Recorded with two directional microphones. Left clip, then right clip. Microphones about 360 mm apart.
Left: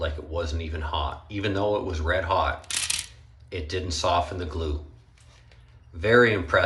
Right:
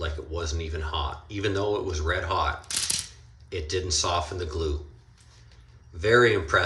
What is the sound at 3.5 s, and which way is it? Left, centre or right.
Speech, centre.